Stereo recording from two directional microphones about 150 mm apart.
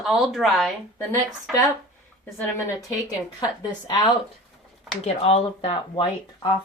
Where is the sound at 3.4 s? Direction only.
30° left (ahead or behind).